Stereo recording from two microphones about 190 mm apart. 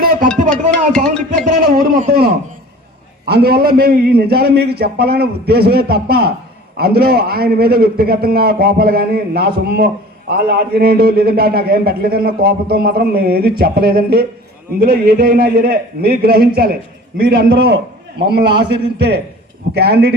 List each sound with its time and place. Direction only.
0.5 s music: 5° left (ahead or behind)
1.7 s a man's voice: 50° right (ahead or behind)